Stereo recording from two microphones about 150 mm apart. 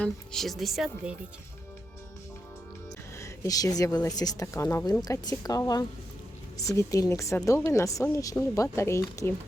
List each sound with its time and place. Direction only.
0.0 s a woman's voice: 5° left (ahead or behind)
3.2 s speech: 20° left (ahead or behind)